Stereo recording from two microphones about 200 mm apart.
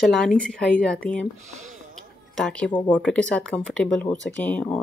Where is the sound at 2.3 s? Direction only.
5° left (ahead or behind).